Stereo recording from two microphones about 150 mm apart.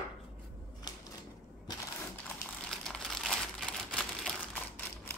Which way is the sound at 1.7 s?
25° left (ahead or behind).